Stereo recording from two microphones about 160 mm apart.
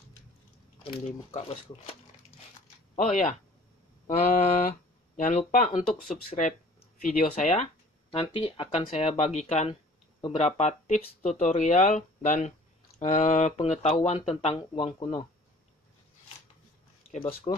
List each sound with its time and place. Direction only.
1.0 s speech: 45° left (ahead or behind)
3.0 s speech: 50° left (ahead or behind)
7.1 s speech: 50° left (ahead or behind)
8.1 s speech: 35° left (ahead or behind)
17.5 s speech: 35° left (ahead or behind)